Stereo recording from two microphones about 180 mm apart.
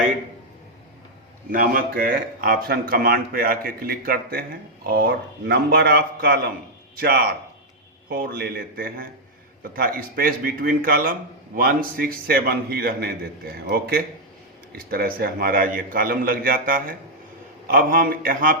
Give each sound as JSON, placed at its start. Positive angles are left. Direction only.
{"t": 1.5, "sound": "a man's voice", "side_deg": -50}